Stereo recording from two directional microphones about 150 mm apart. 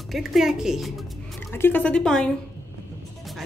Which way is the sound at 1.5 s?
15° left (ahead or behind).